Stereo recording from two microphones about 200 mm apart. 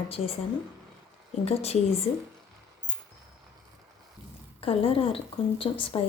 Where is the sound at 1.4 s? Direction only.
30° left (ahead or behind).